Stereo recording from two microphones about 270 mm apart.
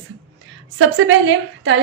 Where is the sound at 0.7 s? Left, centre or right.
Right.